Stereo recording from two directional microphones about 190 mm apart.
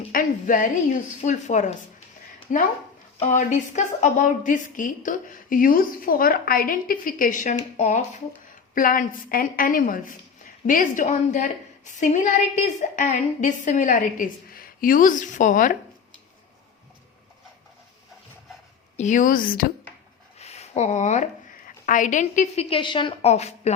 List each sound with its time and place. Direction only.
0.1 s a woman's voice: 45° left (ahead or behind)
18.9 s a woman's voice: 40° left (ahead or behind)
20.4 s a sound: 35° left (ahead or behind)
21.8 s a woman's voice: 40° left (ahead or behind)